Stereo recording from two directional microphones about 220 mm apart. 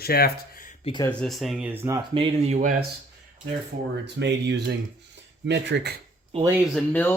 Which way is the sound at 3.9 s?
50° right (ahead or behind).